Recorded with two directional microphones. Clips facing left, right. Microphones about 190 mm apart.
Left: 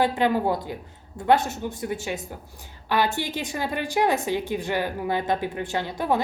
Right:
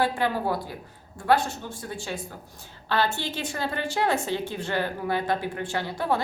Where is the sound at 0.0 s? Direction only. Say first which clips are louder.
Left 3 dB; 20° left (ahead or behind).